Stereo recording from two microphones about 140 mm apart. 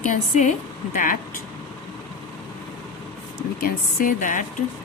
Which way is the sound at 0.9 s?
75° left (ahead or behind).